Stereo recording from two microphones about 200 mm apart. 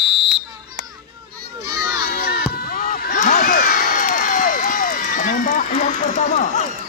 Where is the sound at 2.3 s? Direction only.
45° left (ahead or behind).